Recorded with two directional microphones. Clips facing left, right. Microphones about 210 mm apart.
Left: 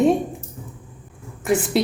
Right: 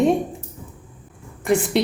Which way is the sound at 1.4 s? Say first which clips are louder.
Right 1 dB; centre (ahead or behind).